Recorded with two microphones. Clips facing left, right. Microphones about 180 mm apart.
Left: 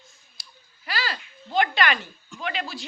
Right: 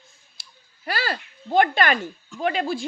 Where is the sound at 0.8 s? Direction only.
50° right (ahead or behind).